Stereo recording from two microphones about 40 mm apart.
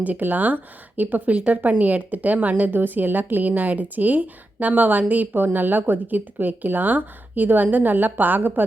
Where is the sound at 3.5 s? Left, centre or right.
Right.